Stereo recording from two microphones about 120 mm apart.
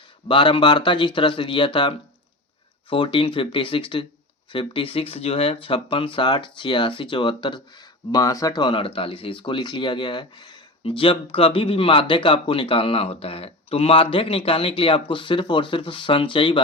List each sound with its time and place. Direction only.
0.3 s speech: 45° left (ahead or behind)
8.1 s speech: 30° left (ahead or behind)